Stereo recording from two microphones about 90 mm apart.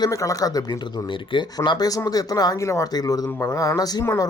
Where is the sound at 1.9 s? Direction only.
40° left (ahead or behind).